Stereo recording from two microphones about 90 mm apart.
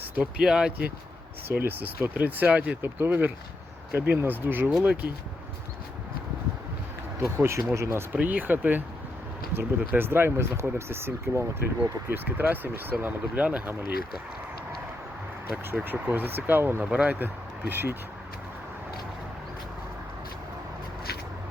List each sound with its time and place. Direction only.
0.2 s speech: 10° right (ahead or behind)
1.6 s speech: 20° right (ahead or behind)
7.2 s speech: 30° right (ahead or behind)
8.1 s speech: 20° right (ahead or behind)
15.7 s speech: 20° right (ahead or behind)